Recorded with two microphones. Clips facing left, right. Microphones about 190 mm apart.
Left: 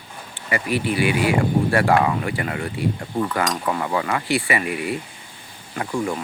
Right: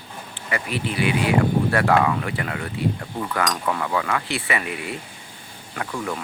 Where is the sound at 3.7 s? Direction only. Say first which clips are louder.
Left 1 dB; 15° left (ahead or behind).